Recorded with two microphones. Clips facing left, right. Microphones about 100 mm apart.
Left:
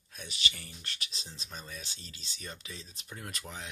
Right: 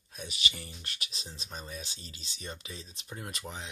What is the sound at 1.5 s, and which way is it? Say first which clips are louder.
Speech: right 3 dB; 35° right (ahead or behind).